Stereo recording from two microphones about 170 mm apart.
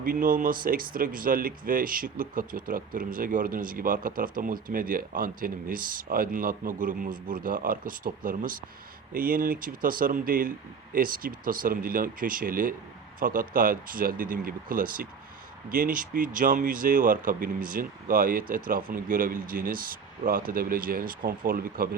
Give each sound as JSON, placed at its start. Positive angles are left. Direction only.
{"t": 0.0, "sound": "speech", "side_deg": -55}